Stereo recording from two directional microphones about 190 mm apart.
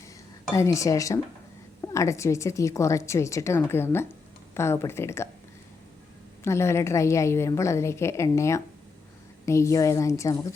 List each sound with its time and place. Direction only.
0.5 s a woman's voice: 15° left (ahead or behind)
6.4 s a woman's voice: 15° left (ahead or behind)